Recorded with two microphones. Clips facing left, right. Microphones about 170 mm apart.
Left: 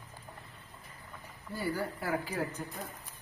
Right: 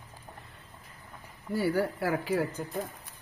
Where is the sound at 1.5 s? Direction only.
80° right.